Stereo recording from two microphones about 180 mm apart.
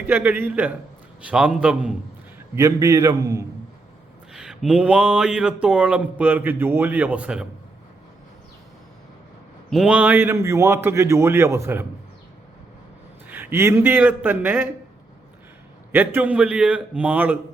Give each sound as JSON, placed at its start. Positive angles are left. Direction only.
{"t": 0.0, "sound": "a man's voice", "side_deg": -10}
{"t": 2.6, "sound": "speech", "side_deg": -15}
{"t": 4.3, "sound": "speech", "side_deg": -5}
{"t": 9.6, "sound": "speech", "side_deg": 0}
{"t": 13.2, "sound": "speech", "side_deg": -10}
{"t": 15.9, "sound": "speech", "side_deg": -10}